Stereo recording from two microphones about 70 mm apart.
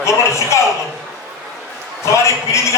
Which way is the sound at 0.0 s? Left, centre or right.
Left.